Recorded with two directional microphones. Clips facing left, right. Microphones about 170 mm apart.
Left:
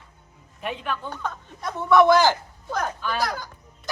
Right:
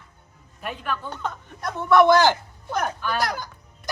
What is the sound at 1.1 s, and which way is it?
Speech, 20° right (ahead or behind).